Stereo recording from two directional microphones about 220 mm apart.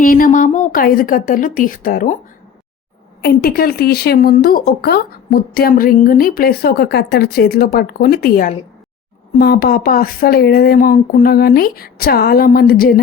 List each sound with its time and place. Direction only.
0.0 s a woman's voice: 40° left (ahead or behind)
3.2 s a woman's voice: 45° left (ahead or behind)